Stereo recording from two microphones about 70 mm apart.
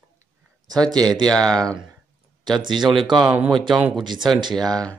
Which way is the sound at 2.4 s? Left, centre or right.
Right.